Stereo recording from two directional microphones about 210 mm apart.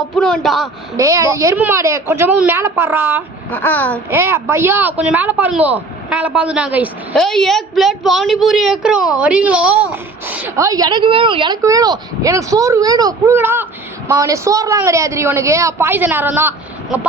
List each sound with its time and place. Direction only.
0.2 s speech: 5° left (ahead or behind)
0.9 s a woman's voice: 15° right (ahead or behind)
3.5 s speech: 10° left (ahead or behind)
4.1 s a woman's voice: 10° right (ahead or behind)